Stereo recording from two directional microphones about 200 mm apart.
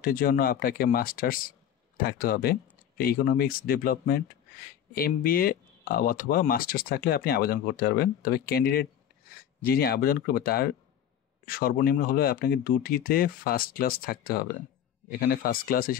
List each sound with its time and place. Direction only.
0.0 s speech: 45° left (ahead or behind)